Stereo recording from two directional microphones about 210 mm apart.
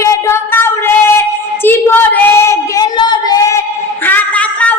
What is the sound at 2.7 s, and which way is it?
Child singing, 20° left (ahead or behind).